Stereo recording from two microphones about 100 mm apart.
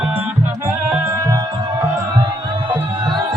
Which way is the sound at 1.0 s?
35° right (ahead or behind).